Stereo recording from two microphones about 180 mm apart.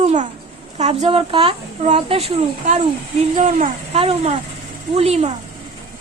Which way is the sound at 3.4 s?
40° right (ahead or behind).